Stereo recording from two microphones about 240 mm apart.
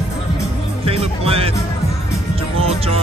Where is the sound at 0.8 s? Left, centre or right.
Right.